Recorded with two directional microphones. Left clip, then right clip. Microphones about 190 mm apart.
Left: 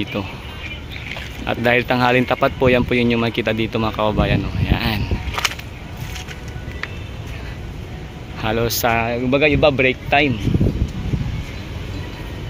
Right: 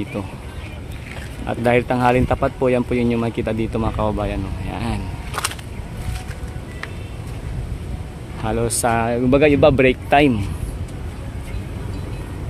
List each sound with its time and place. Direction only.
0.0 s speech: centre (ahead or behind)
1.4 s speech: 5° right (ahead or behind)
8.4 s a man's voice: 5° right (ahead or behind)
9.0 s speech: 35° right (ahead or behind)